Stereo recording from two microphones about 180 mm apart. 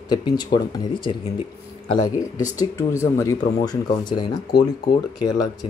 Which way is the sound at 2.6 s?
20° left (ahead or behind).